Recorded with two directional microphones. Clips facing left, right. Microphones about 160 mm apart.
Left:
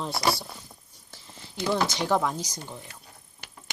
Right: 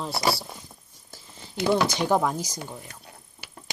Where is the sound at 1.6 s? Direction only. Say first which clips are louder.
Right 4 dB; 60° right (ahead or behind).